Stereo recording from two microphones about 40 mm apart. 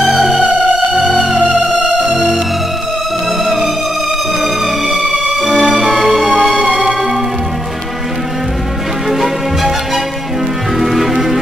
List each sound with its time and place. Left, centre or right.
0.2 s music: centre
1.5 s music: centre
4.4 s music: centre
5.4 s music: right
9.1 s music: centre
10.8 s music: centre